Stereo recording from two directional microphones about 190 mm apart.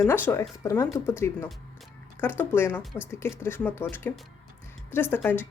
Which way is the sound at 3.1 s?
10° left (ahead or behind).